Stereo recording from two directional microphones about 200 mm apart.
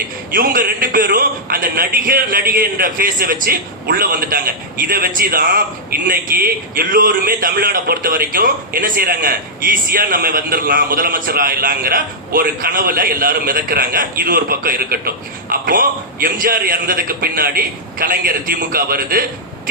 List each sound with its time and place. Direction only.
0.3 s a man's voice: 45° right (ahead or behind)